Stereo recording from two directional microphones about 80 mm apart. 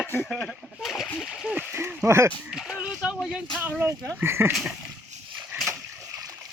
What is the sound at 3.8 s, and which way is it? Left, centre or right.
Speech, right.